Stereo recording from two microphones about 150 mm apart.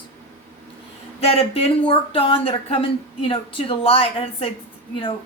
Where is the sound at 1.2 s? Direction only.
40° left (ahead or behind).